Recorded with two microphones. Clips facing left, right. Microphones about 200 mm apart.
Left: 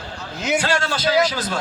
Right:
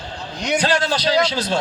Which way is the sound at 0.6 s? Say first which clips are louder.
Right 3 dB; 15° right (ahead or behind).